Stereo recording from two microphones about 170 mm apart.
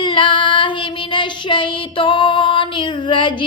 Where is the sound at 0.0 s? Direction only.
30° left (ahead or behind).